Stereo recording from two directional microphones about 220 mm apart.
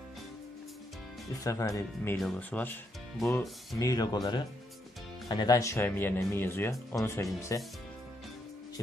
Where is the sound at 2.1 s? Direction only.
5° left (ahead or behind).